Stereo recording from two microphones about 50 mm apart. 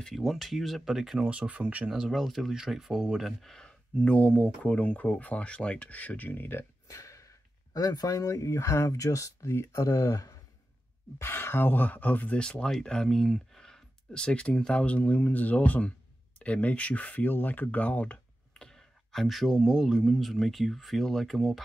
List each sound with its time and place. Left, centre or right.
0.0 s speech: centre
1.3 s speech: right
2.0 s speech: centre
3.4 s speech: centre; by 6.6 s left
6.9 s a sound: left
8.3 s speech: left
11.1 s speech: left
12.4 s speech: centre
18.5 s clicking: centre
19.5 s speech: centre